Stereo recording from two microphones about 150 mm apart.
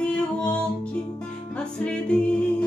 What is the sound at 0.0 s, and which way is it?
Music, 10° left (ahead or behind).